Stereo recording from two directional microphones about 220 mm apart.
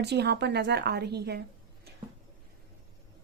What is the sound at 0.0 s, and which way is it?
A woman's voice, 50° right (ahead or behind).